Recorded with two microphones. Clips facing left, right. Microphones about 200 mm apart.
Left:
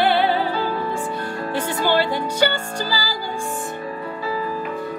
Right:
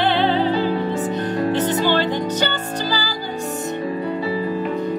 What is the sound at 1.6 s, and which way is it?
Music, 10° left (ahead or behind).